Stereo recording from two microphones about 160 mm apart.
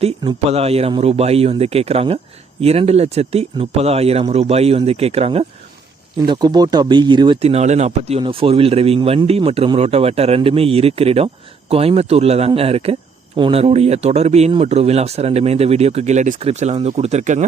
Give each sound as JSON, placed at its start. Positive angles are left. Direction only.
{"t": 0.0, "sound": "speech", "side_deg": -40}
{"t": 6.2, "sound": "speech", "side_deg": -30}